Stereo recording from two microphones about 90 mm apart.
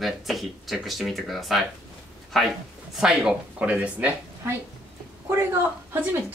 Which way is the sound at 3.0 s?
10° right (ahead or behind).